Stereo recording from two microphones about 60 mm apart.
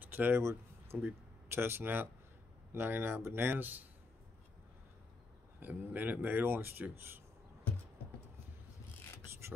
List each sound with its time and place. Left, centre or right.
0.0 s a sound: right
0.9 s speech: right
5.6 s speech: right
9.4 s beatboxing: right